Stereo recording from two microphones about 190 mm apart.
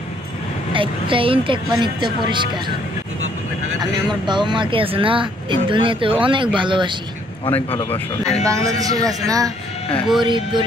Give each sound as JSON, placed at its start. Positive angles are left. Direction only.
{"t": 0.7, "sound": "speech", "side_deg": -25}
{"t": 3.9, "sound": "speech", "side_deg": -25}
{"t": 7.5, "sound": "speech", "side_deg": 10}
{"t": 8.5, "sound": "speech", "side_deg": -15}
{"t": 9.9, "sound": "speech", "side_deg": 0}
{"t": 10.2, "sound": "speech", "side_deg": -25}